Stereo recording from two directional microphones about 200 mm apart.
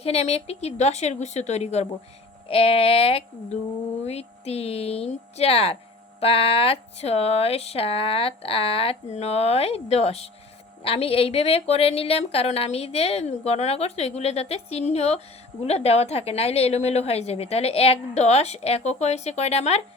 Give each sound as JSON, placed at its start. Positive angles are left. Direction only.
{"t": 0.0, "sound": "a woman's voice", "side_deg": 30}